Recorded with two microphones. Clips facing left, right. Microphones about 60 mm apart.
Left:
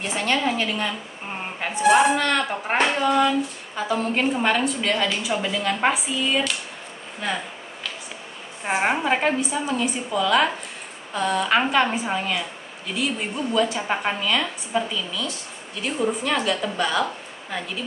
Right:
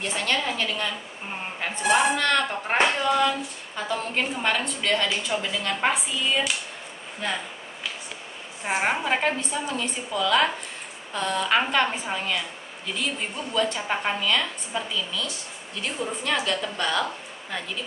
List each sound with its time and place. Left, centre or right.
0.0 s a woman's voice: centre
8.6 s a woman's voice: centre